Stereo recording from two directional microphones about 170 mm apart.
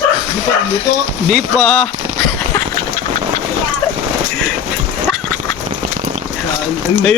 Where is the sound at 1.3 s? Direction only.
Centre (ahead or behind).